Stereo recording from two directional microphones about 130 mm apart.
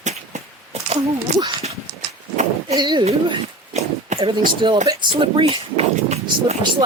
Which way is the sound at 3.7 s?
50° right (ahead or behind).